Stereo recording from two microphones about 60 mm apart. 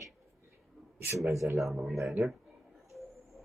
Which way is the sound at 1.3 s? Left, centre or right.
Right.